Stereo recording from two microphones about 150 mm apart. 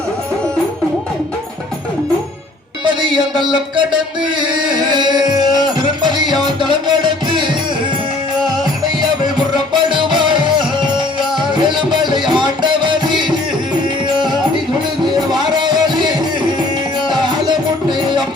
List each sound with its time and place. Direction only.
2.8 s music: 30° right (ahead or behind)
9.7 s music: 30° right (ahead or behind)
15.4 s music: 30° right (ahead or behind)